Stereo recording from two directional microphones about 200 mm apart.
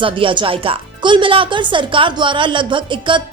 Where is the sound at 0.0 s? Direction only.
25° right (ahead or behind).